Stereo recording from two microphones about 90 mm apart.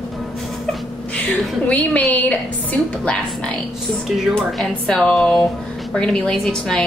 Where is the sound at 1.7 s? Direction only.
15° left (ahead or behind).